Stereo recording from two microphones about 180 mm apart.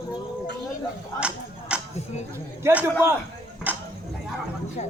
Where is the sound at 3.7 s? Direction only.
10° right (ahead or behind).